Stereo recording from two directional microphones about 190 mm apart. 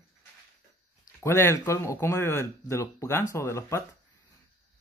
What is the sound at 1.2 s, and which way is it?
Speech, 15° left (ahead or behind).